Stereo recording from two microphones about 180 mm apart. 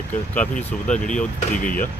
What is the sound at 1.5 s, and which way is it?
Speech, 50° left (ahead or behind).